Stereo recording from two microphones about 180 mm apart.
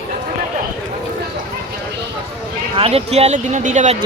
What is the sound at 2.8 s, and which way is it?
Speech, 35° right (ahead or behind).